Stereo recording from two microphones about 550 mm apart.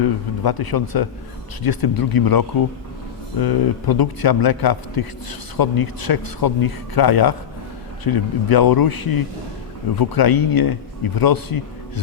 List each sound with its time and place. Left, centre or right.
0.4 s a man's voice: left